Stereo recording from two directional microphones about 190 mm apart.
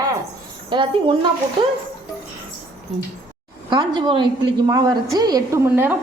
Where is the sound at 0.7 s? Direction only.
25° right (ahead or behind).